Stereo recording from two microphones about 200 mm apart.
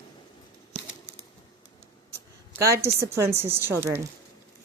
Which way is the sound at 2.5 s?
15° right (ahead or behind).